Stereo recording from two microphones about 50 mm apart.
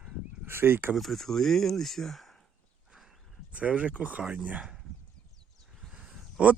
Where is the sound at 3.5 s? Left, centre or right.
Right.